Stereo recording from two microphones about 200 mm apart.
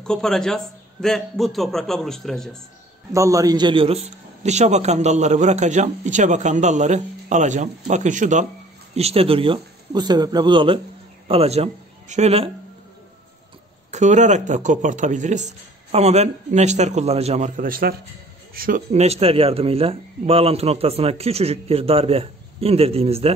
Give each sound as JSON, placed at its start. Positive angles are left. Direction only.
{"t": 0.0, "sound": "a man's voice", "side_deg": 5}
{"t": 3.1, "sound": "a man's voice", "side_deg": -15}
{"t": 13.8, "sound": "a man's voice", "side_deg": -35}